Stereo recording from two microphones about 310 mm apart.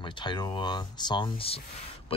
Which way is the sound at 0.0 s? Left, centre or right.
Centre.